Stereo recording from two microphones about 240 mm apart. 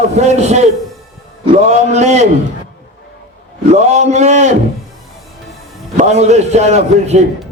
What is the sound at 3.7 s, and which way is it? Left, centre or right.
Speech, right.